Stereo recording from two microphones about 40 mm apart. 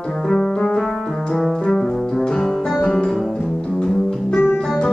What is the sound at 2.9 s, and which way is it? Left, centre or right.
Music, left.